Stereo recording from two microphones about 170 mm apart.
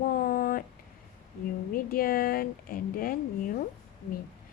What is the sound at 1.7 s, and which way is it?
A woman's voice, 60° left (ahead or behind).